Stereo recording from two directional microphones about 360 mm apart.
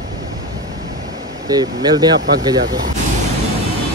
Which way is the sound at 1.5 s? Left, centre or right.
Centre.